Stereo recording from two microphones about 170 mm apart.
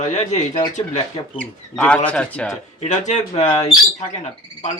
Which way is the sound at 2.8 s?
45° left (ahead or behind).